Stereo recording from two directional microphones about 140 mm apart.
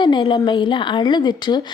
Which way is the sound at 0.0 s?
35° left (ahead or behind).